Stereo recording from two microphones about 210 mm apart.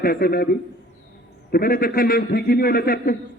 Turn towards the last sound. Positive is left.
turn(degrees=45)  # may be behind; listen again after turning